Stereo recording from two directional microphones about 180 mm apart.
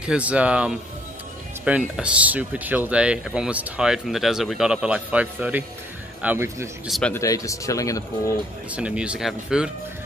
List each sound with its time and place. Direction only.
0.0 s speech: 5° right (ahead or behind)
6.9 s speech: 5° left (ahead or behind)
7.2 s speech: 20° left (ahead or behind)
8.7 s speech: 5° right (ahead or behind)